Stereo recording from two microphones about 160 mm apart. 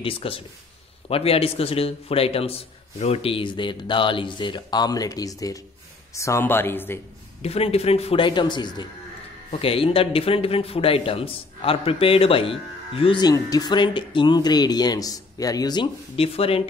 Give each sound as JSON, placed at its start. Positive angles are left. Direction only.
{"t": 0.0, "sound": "speech", "side_deg": 35}
{"t": 7.4, "sound": "speech", "side_deg": 40}